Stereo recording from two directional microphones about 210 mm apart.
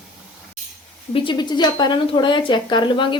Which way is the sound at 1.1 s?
25° left (ahead or behind).